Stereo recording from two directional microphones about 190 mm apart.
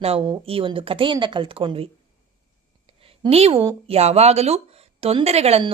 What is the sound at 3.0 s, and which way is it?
Speech, 30° right (ahead or behind).